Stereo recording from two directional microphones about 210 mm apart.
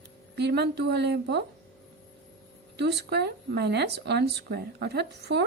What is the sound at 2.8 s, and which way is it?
Speech, 50° right (ahead or behind).